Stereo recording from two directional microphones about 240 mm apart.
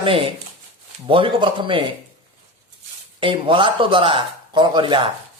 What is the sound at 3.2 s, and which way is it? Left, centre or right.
Speech, right.